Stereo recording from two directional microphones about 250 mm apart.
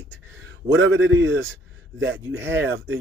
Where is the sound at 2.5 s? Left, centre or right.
Right.